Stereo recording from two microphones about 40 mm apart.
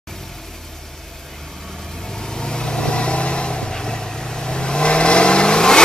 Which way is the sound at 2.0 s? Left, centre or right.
Centre.